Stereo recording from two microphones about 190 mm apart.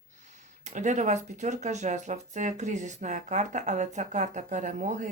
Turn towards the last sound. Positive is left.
turn(degrees=-40)  # may be behind; listen again after turning